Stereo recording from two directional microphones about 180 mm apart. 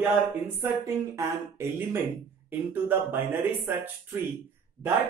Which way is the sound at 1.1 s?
15° right (ahead or behind).